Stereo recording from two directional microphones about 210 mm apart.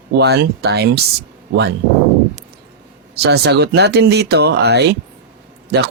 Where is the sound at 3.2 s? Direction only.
50° right (ahead or behind).